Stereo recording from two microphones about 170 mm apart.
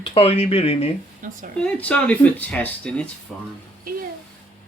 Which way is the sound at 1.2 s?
50° right (ahead or behind).